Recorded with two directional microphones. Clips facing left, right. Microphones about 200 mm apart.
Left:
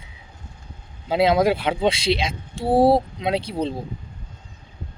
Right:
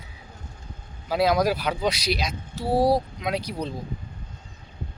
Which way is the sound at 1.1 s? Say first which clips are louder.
Left 4 dB; 25° left (ahead or behind).